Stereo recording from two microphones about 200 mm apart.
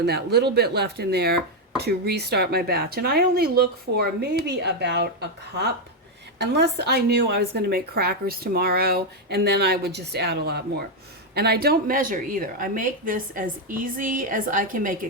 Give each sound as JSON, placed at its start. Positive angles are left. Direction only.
{"t": 0.0, "sound": "a woman's voice", "side_deg": -55}